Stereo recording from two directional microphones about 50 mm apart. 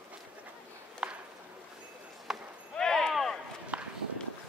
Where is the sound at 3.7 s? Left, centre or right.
Right.